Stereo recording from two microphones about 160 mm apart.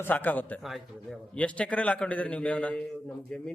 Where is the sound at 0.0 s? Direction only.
10° left (ahead or behind).